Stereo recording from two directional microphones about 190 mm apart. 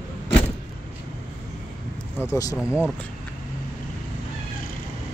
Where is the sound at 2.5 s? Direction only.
5° right (ahead or behind).